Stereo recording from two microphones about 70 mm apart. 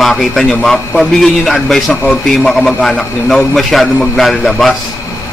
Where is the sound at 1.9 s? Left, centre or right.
Left.